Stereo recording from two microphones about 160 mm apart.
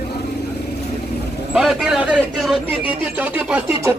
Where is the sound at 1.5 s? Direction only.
Centre (ahead or behind).